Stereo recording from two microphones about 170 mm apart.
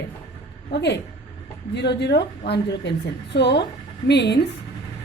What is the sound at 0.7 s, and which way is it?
A woman's voice, 90° left.